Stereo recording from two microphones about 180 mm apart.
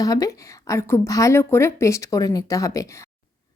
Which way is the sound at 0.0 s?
20° left (ahead or behind).